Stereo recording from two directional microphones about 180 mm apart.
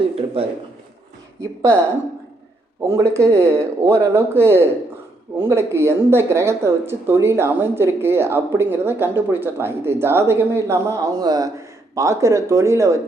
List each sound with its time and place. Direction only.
1.4 s speech: 15° right (ahead or behind)
2.9 s speech: 15° right (ahead or behind)